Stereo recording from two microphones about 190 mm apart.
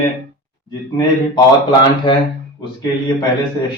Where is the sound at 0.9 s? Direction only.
20° left (ahead or behind).